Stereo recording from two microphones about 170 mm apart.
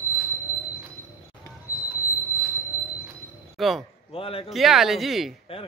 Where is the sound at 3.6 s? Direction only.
Centre (ahead or behind).